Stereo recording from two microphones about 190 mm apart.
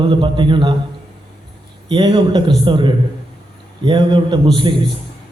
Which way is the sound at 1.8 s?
25° right (ahead or behind).